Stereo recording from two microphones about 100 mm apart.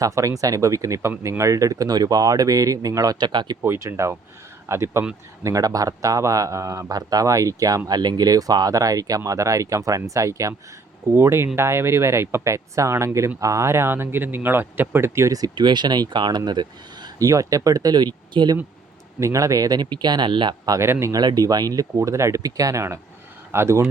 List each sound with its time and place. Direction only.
0.0 s speech: 35° right (ahead or behind)
3.6 s speech: 25° right (ahead or behind); by 18.5 s 45° right (ahead or behind)
19.2 s speech: 30° right (ahead or behind); by 20.7 s 50° right (ahead or behind)
20.7 s speech: 25° right (ahead or behind)
21.1 s speech: 40° right (ahead or behind)